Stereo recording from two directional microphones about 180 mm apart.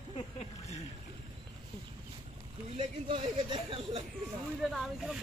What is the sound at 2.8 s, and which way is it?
Speech, 30° right (ahead or behind).